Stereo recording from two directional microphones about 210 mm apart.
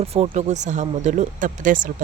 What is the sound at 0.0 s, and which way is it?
Speech, 30° right (ahead or behind).